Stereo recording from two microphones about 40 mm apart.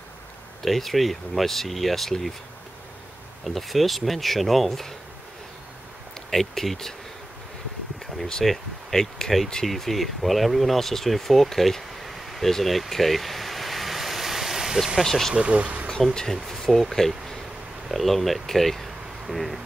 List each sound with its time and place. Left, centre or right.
0.6 s speech: centre
3.4 s speech: centre
6.3 s speech: centre
8.5 s speech: centre
15.0 s speech: centre
15.3 s speech: right
16.3 s speech: centre
17.0 s speech: centre